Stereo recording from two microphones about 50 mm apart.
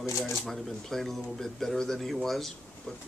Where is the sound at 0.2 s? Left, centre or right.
Centre.